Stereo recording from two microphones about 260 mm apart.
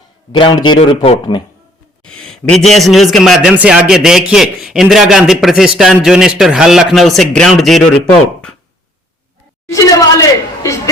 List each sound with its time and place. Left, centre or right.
0.3 s speech: centre
2.0 s a man's voice: centre
9.7 s a sound: centre